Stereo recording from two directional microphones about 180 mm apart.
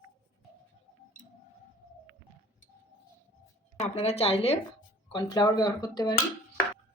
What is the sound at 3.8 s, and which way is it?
Speech, 35° left (ahead or behind).